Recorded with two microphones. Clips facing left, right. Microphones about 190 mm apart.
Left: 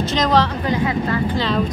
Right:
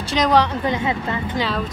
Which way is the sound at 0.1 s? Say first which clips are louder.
Right 2 dB; 15° right (ahead or behind).